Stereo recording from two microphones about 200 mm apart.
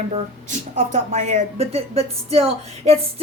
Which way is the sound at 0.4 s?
35° right (ahead or behind).